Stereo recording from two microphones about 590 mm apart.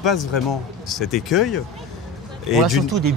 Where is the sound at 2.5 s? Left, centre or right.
Centre.